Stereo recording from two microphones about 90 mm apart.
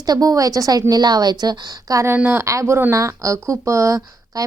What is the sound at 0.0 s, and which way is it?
A woman's voice, 45° right (ahead or behind).